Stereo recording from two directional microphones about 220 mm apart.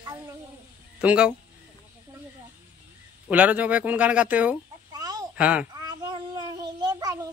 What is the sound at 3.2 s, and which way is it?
Speech, 5° right (ahead or behind).